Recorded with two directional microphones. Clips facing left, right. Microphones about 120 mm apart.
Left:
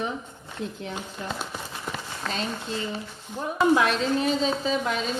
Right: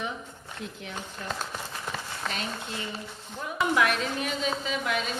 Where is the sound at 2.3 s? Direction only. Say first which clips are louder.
Left 4 dB; 30° left (ahead or behind).